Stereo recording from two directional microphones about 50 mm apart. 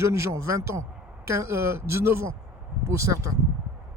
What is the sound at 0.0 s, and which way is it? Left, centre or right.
Speech, right.